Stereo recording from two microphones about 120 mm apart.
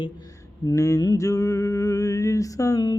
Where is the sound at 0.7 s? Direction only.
30° left (ahead or behind).